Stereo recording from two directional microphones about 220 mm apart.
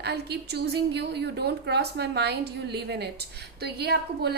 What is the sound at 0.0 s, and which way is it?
A woman's voice, 50° right (ahead or behind).